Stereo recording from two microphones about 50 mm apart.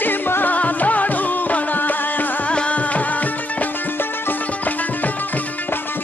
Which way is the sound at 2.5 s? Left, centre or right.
Left.